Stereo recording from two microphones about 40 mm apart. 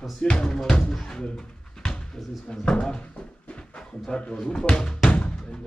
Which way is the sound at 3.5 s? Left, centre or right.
Centre.